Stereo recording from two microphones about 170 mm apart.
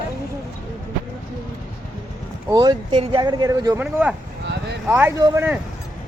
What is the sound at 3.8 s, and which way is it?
Speech, 10° right (ahead or behind).